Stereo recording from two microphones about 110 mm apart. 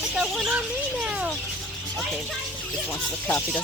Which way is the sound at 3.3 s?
20° left (ahead or behind).